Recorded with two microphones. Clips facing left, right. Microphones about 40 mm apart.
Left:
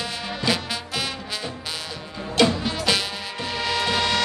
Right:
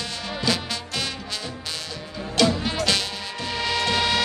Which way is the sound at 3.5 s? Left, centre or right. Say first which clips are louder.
Even; centre.